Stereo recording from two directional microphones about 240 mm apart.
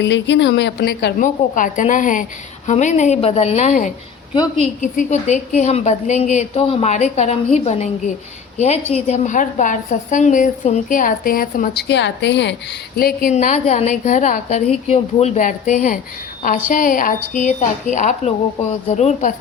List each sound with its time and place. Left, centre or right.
0.0 s a woman's voice: left
13.0 s a woman's voice: left